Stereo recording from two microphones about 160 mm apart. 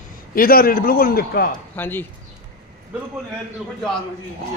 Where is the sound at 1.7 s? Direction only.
10° left (ahead or behind).